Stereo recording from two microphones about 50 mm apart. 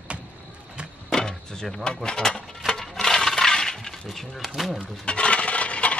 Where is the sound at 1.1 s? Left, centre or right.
Centre.